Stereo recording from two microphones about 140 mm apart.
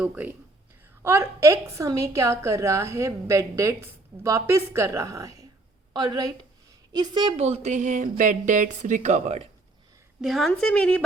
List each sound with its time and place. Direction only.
0.0 s a woman's voice: 10° right (ahead or behind); by 7.3 s 30° right (ahead or behind)
7.3 s a woman's voice: 50° right (ahead or behind)
10.2 s a woman's voice: centre (ahead or behind)